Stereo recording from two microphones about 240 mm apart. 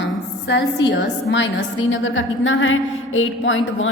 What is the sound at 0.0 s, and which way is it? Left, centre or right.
A woman's voice, left.